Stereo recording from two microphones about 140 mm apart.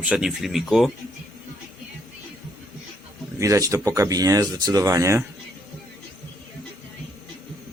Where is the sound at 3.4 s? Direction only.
25° right (ahead or behind).